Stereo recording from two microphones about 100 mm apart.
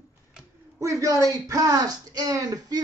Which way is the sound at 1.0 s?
35° right (ahead or behind).